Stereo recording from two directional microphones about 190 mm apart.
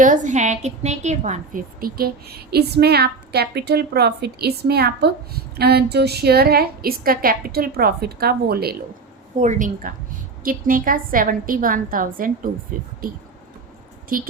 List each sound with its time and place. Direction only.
0.0 s a woman's voice: 40° right (ahead or behind)
9.4 s a woman's voice: 40° right (ahead or behind)
14.1 s a woman's voice: 50° right (ahead or behind)